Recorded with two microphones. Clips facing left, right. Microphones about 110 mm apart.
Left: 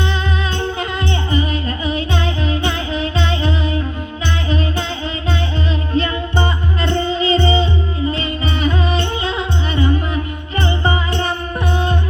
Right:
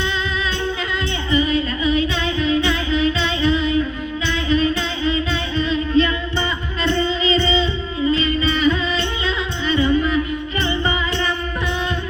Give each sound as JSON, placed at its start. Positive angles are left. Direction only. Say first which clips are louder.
{"t": 1.4, "sound": "music", "louder": "right 2 dB", "side_deg": 55}